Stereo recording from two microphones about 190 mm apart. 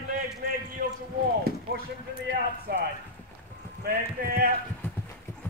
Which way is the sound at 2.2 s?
65° right (ahead or behind).